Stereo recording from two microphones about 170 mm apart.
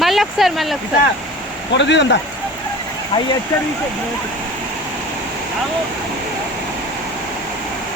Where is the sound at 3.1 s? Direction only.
30° left (ahead or behind).